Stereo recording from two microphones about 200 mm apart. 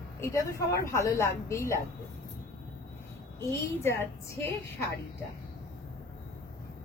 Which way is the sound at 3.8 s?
10° left (ahead or behind).